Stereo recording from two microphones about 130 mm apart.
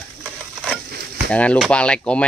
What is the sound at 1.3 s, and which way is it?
Speech, 10° left (ahead or behind).